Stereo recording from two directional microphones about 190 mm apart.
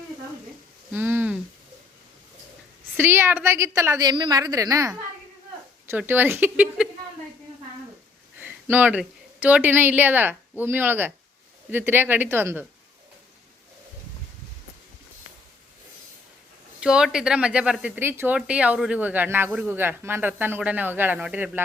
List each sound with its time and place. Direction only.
0.9 s speech: 10° right (ahead or behind)
2.9 s speech: 10° right (ahead or behind)
8.4 s a woman's voice: 10° right (ahead or behind)
16.8 s speech: 5° right (ahead or behind)